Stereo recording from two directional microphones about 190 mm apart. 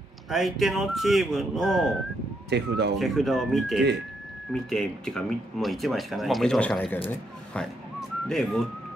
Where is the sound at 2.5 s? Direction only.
60° right (ahead or behind).